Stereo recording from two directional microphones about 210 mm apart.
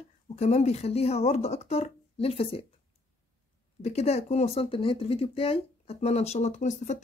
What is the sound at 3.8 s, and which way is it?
Speech, 30° left (ahead or behind).